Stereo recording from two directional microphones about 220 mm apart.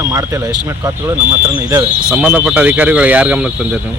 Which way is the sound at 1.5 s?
5° right (ahead or behind).